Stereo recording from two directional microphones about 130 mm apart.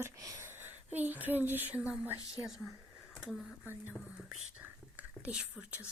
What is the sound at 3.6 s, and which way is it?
Speech, 15° right (ahead or behind).